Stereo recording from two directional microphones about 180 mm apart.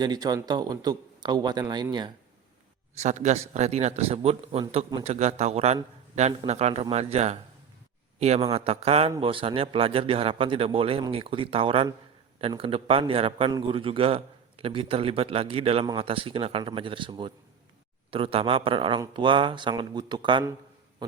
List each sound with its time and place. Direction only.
0.0 s speech: 20° right (ahead or behind)
2.9 s a man's voice: 40° right (ahead or behind)